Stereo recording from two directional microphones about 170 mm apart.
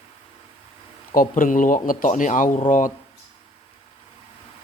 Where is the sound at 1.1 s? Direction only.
55° left (ahead or behind).